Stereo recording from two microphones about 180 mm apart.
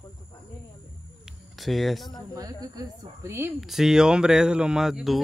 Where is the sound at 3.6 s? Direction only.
Centre (ahead or behind).